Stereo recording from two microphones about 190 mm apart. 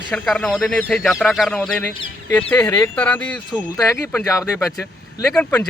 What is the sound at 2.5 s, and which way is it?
Speech, 15° left (ahead or behind).